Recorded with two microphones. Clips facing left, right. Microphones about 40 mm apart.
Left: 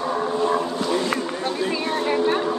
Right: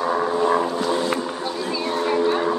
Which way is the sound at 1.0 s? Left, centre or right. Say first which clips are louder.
Even; left.